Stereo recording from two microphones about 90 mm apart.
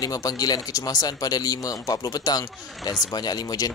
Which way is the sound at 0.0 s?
45° left (ahead or behind).